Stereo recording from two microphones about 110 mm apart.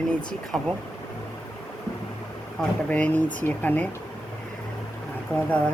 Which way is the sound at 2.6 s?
10° left (ahead or behind).